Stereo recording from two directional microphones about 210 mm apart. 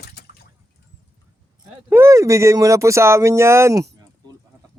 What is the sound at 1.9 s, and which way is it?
Speech, 10° right (ahead or behind).